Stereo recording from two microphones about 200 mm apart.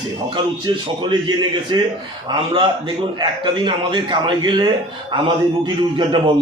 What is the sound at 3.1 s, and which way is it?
A man's voice, 25° right (ahead or behind).